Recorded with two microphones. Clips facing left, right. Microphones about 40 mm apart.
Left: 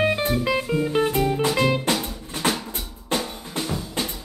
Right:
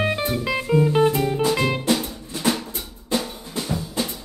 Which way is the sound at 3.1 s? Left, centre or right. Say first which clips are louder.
Right 1 dB; left.